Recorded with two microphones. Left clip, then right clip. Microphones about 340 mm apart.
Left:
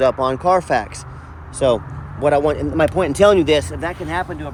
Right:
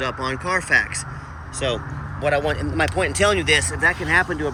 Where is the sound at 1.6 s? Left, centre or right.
Centre.